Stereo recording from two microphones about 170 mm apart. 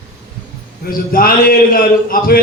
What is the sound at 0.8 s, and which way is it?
A man's voice, 60° left (ahead or behind).